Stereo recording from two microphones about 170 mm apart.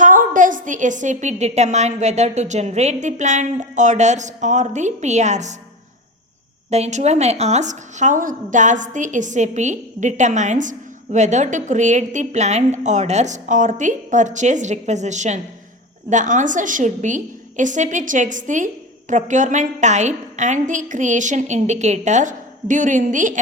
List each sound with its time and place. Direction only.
0.0 s a woman's voice: 50° right (ahead or behind)
6.7 s a woman's voice: 40° right (ahead or behind)